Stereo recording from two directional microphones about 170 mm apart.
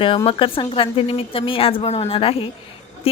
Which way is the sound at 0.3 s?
30° left (ahead or behind).